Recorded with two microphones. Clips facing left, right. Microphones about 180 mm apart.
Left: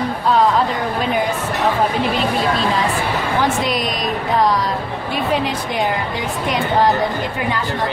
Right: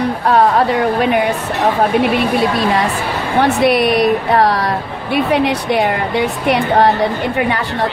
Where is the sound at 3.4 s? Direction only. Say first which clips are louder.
Right 9 dB; 65° right (ahead or behind).